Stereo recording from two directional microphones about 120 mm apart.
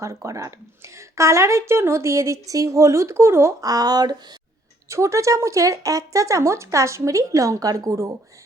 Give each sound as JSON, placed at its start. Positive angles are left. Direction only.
{"t": 0.0, "sound": "a woman's voice", "side_deg": -25}